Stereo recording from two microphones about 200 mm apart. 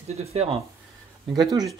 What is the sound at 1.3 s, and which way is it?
Speech, 20° right (ahead or behind).